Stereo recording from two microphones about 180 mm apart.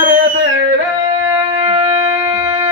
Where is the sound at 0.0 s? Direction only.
50° right (ahead or behind).